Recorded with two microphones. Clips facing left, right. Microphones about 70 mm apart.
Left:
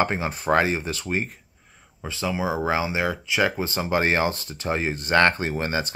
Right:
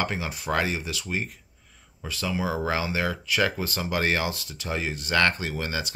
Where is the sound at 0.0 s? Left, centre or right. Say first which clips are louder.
Left 5 dB; left.